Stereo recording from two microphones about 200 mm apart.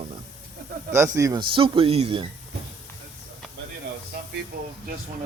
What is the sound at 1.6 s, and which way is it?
Speech, 25° right (ahead or behind).